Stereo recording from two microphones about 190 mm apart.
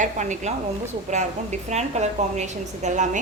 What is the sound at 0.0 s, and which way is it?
Speech, 40° right (ahead or behind).